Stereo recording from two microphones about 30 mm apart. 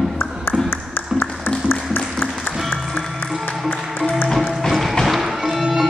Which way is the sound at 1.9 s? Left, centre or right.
Left.